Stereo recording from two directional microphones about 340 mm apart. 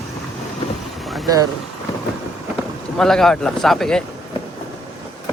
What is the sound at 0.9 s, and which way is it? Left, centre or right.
Vehicle, centre.